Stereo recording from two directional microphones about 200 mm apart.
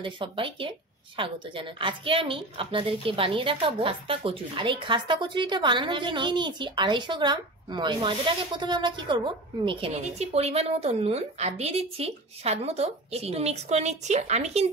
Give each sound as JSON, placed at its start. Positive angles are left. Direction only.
{"t": 0.0, "sound": "a woman's voice", "side_deg": -25}